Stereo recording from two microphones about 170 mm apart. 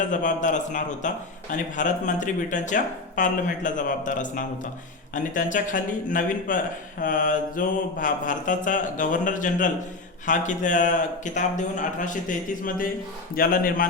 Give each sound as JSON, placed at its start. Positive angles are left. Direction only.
{"t": 0.0, "sound": "a man's voice", "side_deg": 50}